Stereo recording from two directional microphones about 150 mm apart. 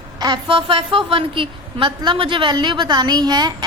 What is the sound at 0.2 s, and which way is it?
A woman's voice, 30° right (ahead or behind).